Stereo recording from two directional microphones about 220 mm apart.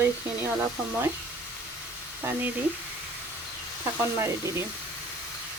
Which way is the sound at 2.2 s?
10° right (ahead or behind).